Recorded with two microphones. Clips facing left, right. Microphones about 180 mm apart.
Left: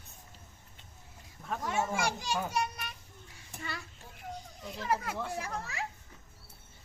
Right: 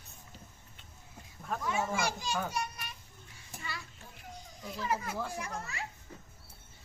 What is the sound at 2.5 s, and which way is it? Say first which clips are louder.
Children playing: left 4 dB; 60° left (ahead or behind).